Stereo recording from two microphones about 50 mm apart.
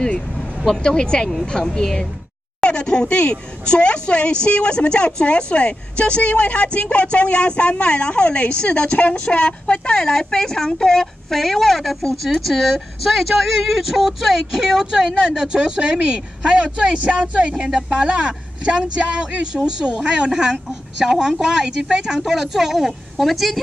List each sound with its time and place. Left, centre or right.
0.0 s vehicle: centre
0.7 s a woman's voice: centre